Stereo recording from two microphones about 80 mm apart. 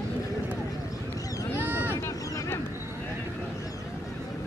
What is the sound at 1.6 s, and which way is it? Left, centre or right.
Vehicle, right.